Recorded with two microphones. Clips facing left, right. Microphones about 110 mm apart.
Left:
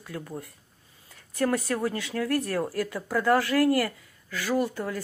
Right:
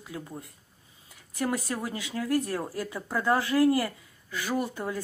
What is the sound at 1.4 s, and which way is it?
Speech, 15° right (ahead or behind).